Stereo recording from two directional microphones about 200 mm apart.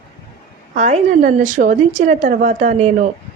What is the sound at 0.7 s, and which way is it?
A woman's voice, 35° right (ahead or behind).